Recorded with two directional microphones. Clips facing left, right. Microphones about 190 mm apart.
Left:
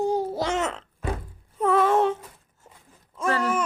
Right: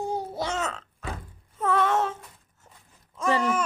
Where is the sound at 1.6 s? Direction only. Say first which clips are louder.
Left 4 dB; centre (ahead or behind).